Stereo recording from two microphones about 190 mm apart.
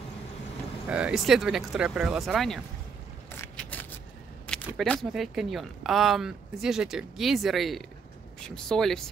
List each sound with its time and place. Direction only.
0.8 s speech: 5° right (ahead or behind)
3.3 s a sound: 10° left (ahead or behind)
4.5 s speech: 5° left (ahead or behind)